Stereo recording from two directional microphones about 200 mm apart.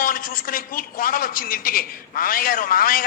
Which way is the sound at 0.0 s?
45° left (ahead or behind).